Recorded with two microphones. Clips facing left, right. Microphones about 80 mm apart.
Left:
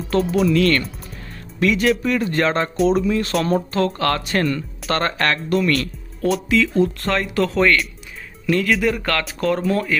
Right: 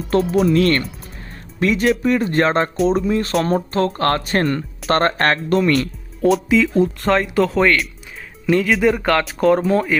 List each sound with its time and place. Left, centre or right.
0.1 s speech: right
6.2 s speech: centre